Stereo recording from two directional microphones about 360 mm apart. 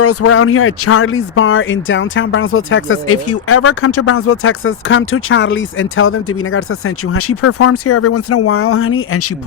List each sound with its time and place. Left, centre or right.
0.0 s speech: left